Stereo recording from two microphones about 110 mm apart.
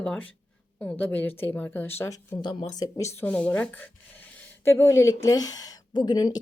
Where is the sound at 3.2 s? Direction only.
10° left (ahead or behind); by 6.4 s 40° left (ahead or behind).